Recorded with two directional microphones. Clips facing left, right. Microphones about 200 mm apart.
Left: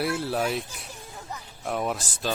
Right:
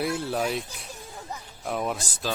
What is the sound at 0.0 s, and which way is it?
Speech, centre (ahead or behind).